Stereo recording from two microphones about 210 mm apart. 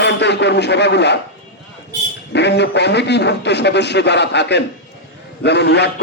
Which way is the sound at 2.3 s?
55° left (ahead or behind).